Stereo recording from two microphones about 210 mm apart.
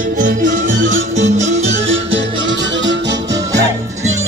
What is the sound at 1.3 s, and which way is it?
Music, 35° right (ahead or behind).